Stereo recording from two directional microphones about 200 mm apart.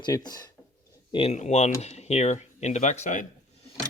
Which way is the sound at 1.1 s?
30° left (ahead or behind).